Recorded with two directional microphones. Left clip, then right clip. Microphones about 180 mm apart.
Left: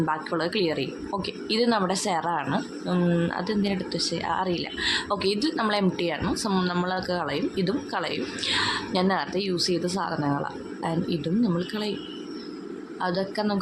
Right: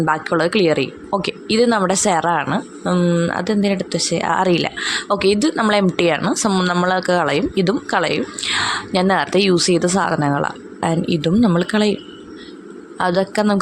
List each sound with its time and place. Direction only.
0.0 s speech: 35° right (ahead or behind)
6.5 s a woman's voice: 30° right (ahead or behind); by 11.9 s 45° right (ahead or behind)
13.0 s speech: 40° right (ahead or behind)